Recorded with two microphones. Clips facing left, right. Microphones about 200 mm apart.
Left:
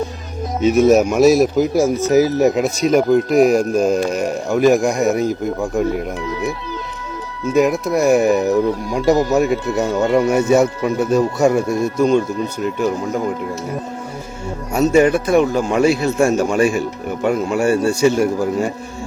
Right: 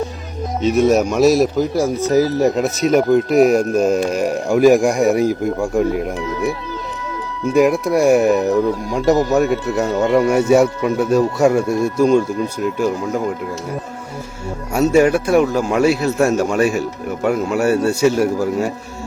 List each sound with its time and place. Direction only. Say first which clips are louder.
0.6 s a man's voice: left 2 dB; 5° left (ahead or behind)
1.7 s speech: left 2 dB; 20° left (ahead or behind)
2.6 s a man's voice: even; centre (ahead or behind)
7.5 s a man's voice: right 1 dB; centre (ahead or behind)
14.8 s a man's voice: even; 5° right (ahead or behind)